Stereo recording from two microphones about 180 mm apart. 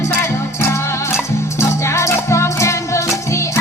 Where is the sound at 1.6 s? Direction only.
15° left (ahead or behind).